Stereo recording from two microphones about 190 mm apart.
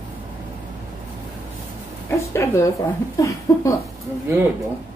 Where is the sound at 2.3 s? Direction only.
15° left (ahead or behind).